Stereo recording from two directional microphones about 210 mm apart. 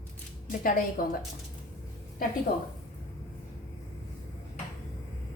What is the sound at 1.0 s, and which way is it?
Speech, 45° left (ahead or behind).